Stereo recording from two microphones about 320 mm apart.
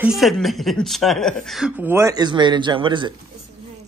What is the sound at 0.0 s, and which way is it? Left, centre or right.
A woman's voice, centre.